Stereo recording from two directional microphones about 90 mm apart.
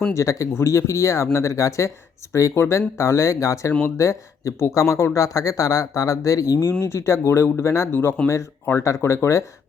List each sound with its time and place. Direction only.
0.1 s speech: 35° left (ahead or behind)
3.7 s speech: 15° left (ahead or behind)
3.9 s speech: 35° left (ahead or behind)